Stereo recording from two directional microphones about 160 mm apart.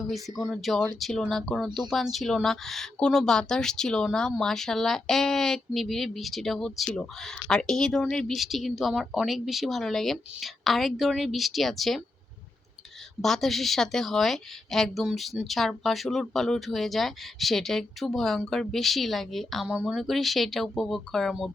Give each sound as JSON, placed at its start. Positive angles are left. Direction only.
{"t": 0.0, "sound": "speech", "side_deg": 0}
{"t": 13.2, "sound": "speech", "side_deg": 0}